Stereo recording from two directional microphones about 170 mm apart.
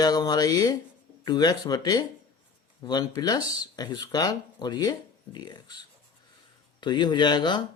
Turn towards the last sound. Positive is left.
turn(degrees=25)  # may be behind; listen again after turning